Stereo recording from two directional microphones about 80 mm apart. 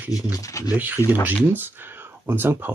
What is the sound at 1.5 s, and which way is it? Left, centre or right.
Speech, right.